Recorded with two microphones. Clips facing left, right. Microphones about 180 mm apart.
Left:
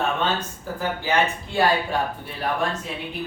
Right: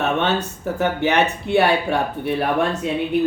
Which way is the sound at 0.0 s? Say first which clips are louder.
Right 4 dB; 70° right (ahead or behind).